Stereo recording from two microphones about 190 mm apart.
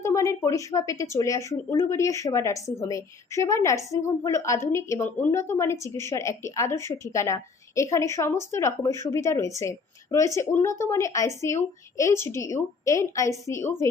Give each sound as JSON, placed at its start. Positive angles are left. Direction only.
{"t": 0.0, "sound": "speech", "side_deg": 15}